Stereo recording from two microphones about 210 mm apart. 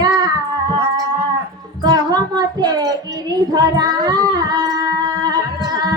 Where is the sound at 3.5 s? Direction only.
20° right (ahead or behind).